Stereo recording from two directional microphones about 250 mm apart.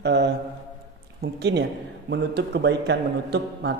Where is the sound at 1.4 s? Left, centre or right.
Right.